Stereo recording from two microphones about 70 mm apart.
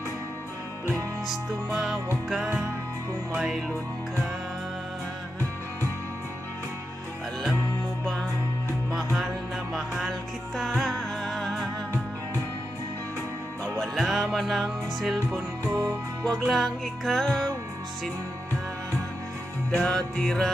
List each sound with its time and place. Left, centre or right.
1.2 s music: centre
8.0 s music: centre
8.9 s music: centre
13.7 s music: centre
15.6 s music: right
16.3 s music: centre
19.7 s music: centre